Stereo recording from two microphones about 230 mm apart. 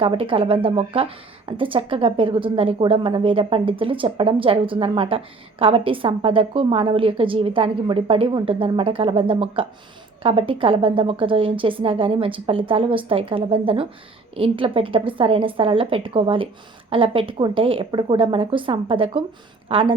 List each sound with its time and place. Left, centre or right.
0.0 s a woman's voice: right